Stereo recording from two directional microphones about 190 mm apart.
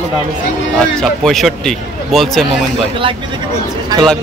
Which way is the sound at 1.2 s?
Centre (ahead or behind).